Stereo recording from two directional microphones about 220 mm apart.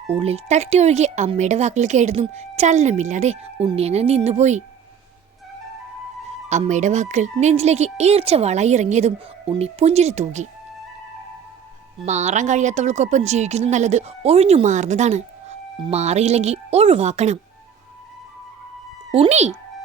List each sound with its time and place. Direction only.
0.1 s speech: 25° right (ahead or behind)
6.5 s speech: 30° right (ahead or behind)
12.0 s speech: 30° right (ahead or behind)
19.1 s speech: 30° right (ahead or behind)